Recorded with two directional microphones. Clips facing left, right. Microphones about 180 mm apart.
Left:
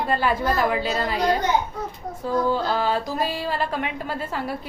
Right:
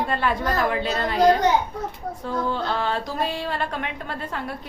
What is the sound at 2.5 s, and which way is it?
A woman's voice, 5° left (ahead or behind).